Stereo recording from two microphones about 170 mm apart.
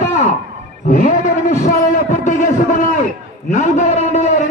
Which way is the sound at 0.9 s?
50° left (ahead or behind).